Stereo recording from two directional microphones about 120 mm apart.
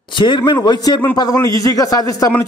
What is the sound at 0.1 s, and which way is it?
A man's voice, 40° left (ahead or behind).